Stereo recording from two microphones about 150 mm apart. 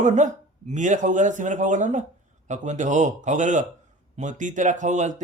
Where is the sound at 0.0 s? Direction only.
55° right (ahead or behind).